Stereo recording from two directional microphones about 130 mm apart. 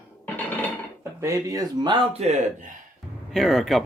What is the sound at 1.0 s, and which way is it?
Speech, 20° right (ahead or behind).